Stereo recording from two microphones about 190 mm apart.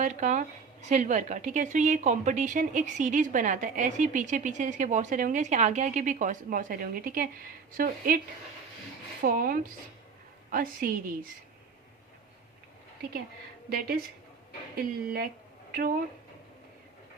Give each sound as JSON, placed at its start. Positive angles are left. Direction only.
{"t": 0.0, "sound": "a woman's voice", "side_deg": -40}
{"t": 9.2, "sound": "a woman's voice", "side_deg": -50}
{"t": 13.7, "sound": "a woman's voice", "side_deg": -50}